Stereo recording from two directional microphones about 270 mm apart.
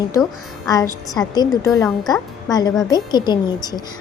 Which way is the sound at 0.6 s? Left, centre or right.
Centre.